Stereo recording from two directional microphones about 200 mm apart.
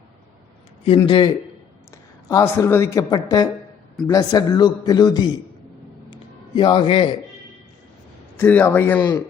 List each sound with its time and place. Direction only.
1.0 s a man's voice: 25° left (ahead or behind)
2.3 s a man's voice: 15° left (ahead or behind)
6.6 s a man's voice: 25° left (ahead or behind)
8.4 s speech: 10° left (ahead or behind)